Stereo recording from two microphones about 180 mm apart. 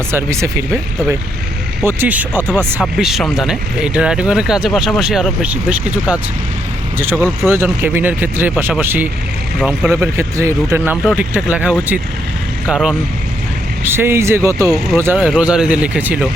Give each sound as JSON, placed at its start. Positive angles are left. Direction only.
{"t": 0.1, "sound": "speech", "side_deg": -15}
{"t": 1.8, "sound": "speech", "side_deg": -10}